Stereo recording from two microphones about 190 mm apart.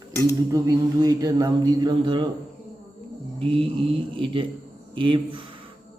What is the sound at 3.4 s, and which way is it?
Speech, 30° right (ahead or behind).